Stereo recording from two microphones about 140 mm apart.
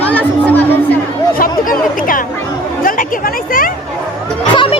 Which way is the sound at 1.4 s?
85° left.